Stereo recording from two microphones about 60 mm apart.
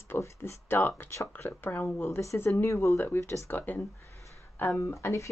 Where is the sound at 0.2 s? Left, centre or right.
Left.